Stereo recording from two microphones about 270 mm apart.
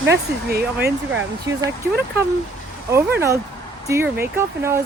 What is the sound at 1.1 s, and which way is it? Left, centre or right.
Speech, centre.